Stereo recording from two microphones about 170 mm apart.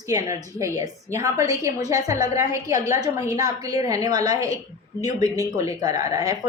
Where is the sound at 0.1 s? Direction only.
20° right (ahead or behind).